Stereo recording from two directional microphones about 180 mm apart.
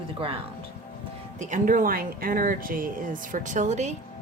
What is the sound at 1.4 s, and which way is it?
Speech, 45° right (ahead or behind).